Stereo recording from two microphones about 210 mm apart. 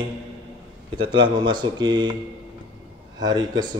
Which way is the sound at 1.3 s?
20° right (ahead or behind).